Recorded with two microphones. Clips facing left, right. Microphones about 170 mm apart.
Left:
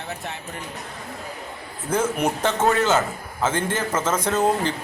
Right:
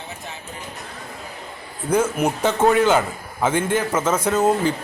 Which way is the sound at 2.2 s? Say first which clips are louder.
Right 3 dB; 10° right (ahead or behind).